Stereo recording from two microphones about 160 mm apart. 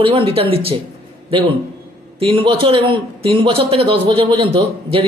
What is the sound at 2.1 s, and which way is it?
A man's voice, 35° right (ahead or behind).